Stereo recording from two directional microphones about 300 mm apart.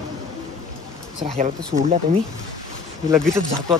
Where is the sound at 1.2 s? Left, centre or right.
Right.